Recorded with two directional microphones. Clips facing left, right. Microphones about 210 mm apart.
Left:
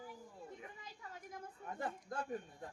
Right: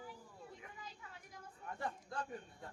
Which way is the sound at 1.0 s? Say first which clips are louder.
Left 5 dB; 45° left (ahead or behind).